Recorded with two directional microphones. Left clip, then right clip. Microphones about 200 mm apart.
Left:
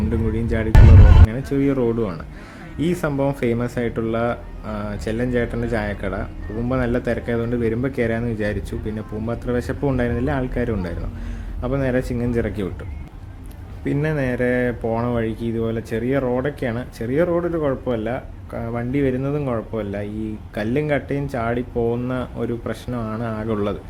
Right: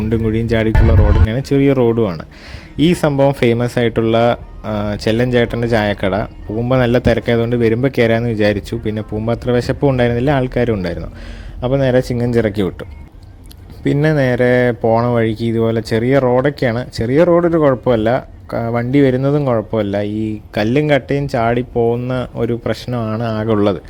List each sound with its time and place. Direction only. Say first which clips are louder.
0.1 s speech: right 10 dB; 30° right (ahead or behind)
13.8 s speech: right 8 dB; 35° right (ahead or behind)